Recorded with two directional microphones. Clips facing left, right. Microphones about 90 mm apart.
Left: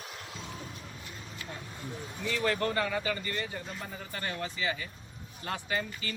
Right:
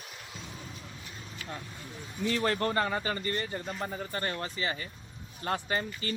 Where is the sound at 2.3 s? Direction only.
35° right (ahead or behind).